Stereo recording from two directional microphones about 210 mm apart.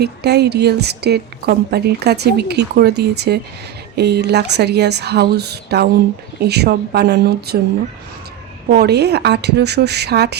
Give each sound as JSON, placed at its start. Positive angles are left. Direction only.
{"t": 0.0, "sound": "a woman's voice", "side_deg": -50}
{"t": 8.7, "sound": "a woman's voice", "side_deg": -50}